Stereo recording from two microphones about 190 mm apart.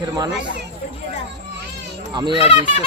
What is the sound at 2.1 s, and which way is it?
Speech, 25° right (ahead or behind).